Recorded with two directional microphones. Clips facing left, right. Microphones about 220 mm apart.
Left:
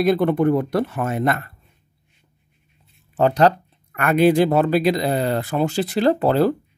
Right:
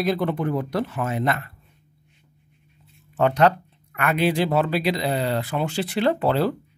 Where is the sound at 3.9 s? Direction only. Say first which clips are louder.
Left 6 dB; 45° left (ahead or behind).